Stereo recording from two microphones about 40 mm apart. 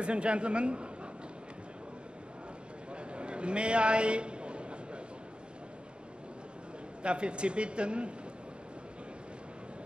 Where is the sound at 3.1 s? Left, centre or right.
Right.